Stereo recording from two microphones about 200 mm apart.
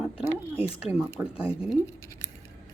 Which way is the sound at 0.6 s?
5° right (ahead or behind).